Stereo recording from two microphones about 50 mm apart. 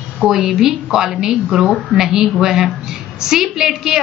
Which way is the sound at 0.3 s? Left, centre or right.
Centre.